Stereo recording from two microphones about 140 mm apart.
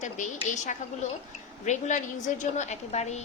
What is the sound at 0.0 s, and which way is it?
A woman's voice, 60° left (ahead or behind).